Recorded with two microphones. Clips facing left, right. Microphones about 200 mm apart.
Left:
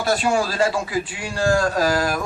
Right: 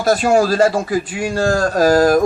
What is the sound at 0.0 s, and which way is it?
A man's voice, 40° right (ahead or behind).